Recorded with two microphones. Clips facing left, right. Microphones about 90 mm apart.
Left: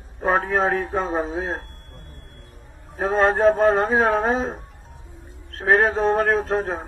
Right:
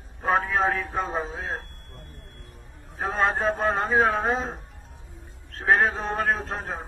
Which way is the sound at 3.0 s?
55° left (ahead or behind).